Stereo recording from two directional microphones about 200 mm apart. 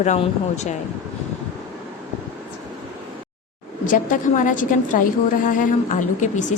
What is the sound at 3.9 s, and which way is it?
A woman's voice, 40° left (ahead or behind).